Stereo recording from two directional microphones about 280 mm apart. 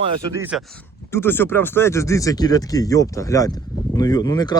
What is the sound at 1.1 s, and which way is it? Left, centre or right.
Speech, centre.